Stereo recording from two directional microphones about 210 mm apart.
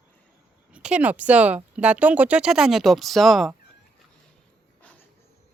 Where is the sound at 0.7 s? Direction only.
5° right (ahead or behind).